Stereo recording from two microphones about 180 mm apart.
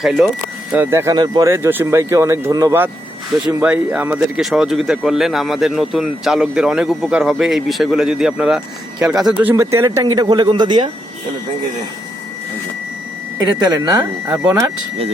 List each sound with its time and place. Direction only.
0.0 s speech: 5° right (ahead or behind); by 10.8 s 25° right (ahead or behind)
13.7 s speech: 15° right (ahead or behind)